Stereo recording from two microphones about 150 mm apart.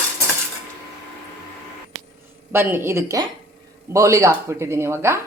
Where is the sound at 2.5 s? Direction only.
15° right (ahead or behind).